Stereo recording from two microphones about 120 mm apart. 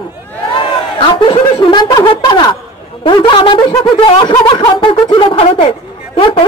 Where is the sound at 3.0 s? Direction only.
40° left (ahead or behind).